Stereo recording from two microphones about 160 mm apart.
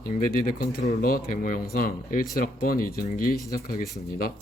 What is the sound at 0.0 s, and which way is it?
Speech, 60° left (ahead or behind).